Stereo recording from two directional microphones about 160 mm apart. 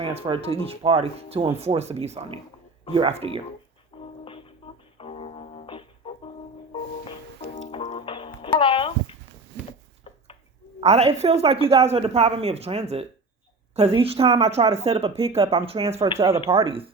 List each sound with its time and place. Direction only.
0.0 s speech: 35° right (ahead or behind)
4.2 s music: 35° left (ahead or behind)
7.7 s music: 30° left (ahead or behind)
8.5 s a sound: 30° left (ahead or behind)
10.8 s speech: 40° right (ahead or behind)